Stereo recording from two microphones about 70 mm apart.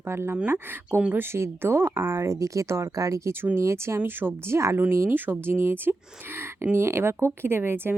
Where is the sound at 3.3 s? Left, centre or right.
Right.